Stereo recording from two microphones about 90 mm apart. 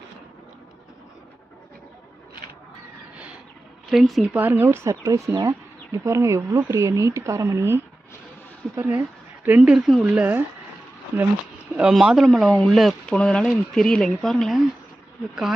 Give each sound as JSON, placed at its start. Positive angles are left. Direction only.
{"t": 3.8, "sound": "speech", "side_deg": 0}
{"t": 4.4, "sound": "speech", "side_deg": -20}
{"t": 8.7, "sound": "a sound", "side_deg": -25}
{"t": 9.6, "sound": "speech", "side_deg": -5}
{"t": 10.1, "sound": "speech", "side_deg": -20}
{"t": 11.8, "sound": "speech", "side_deg": -5}